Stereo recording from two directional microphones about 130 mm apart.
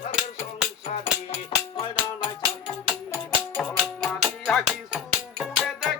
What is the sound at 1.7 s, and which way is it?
Music, 40° left (ahead or behind).